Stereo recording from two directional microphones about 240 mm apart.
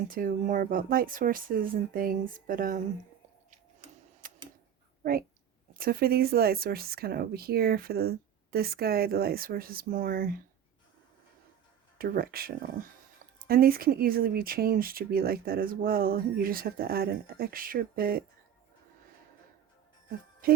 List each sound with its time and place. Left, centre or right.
0.1 s speech: right
4.2 s a sound: right
5.7 s speech: right
11.9 s speech: right
20.4 s music: right